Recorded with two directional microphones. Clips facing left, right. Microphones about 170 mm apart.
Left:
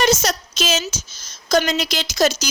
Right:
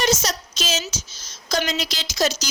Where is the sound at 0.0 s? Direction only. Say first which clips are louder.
Left 4 dB; 55° left (ahead or behind).